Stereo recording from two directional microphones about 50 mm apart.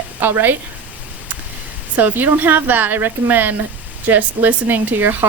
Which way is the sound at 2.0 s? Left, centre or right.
Right.